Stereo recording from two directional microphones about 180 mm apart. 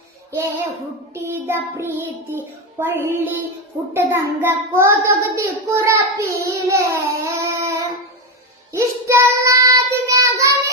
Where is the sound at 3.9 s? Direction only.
15° right (ahead or behind).